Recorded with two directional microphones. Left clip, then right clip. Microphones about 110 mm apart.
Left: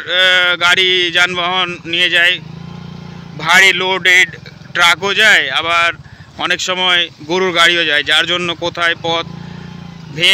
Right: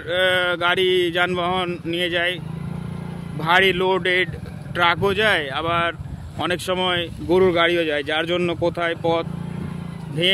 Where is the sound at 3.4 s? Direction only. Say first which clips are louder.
Left 8 dB; 25° right (ahead or behind).